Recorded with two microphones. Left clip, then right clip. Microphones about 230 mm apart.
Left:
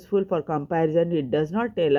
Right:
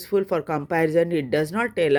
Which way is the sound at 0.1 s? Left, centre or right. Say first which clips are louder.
Right 1 dB; right.